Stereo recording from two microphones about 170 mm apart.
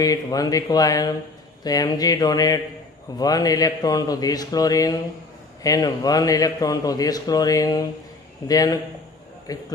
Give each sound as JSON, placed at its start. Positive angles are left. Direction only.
{"t": 0.0, "sound": "a man's voice", "side_deg": 20}